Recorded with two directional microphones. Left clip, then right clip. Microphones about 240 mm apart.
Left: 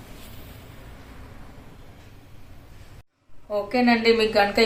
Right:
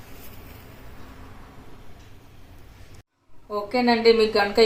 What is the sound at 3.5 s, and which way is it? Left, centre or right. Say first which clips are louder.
Speech: left 1 dB; centre.